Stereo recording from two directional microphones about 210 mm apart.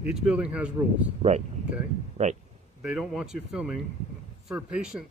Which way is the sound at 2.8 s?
Centre (ahead or behind).